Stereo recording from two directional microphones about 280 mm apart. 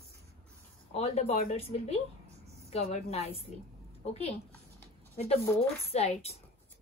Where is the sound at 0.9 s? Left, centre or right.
Left.